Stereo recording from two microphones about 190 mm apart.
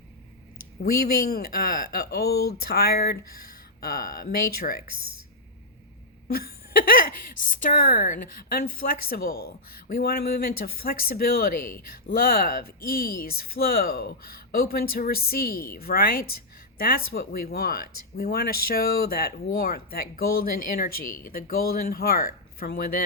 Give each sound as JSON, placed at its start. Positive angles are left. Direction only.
{"t": 0.8, "sound": "a woman's voice", "side_deg": 55}
{"t": 6.2, "sound": "a woman's voice", "side_deg": 50}
{"t": 21.0, "sound": "speech", "side_deg": 15}
{"t": 21.2, "sound": "a woman's voice", "side_deg": 50}